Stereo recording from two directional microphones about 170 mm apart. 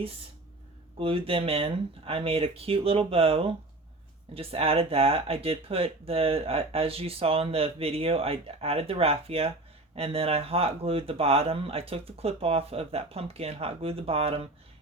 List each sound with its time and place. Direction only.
0.9 s speech: 35° right (ahead or behind)